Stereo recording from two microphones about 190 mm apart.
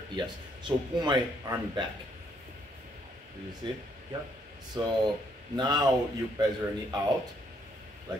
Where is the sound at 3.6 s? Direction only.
25° right (ahead or behind).